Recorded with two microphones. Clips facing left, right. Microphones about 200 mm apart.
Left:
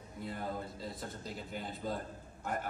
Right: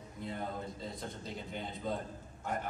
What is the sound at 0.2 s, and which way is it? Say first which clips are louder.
A man's voice: even; 5° left (ahead or behind).